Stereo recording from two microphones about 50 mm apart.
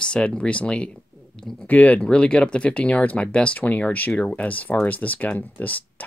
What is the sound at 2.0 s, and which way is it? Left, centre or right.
Speech, centre.